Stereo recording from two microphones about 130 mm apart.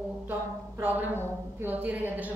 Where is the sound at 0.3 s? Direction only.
15° right (ahead or behind).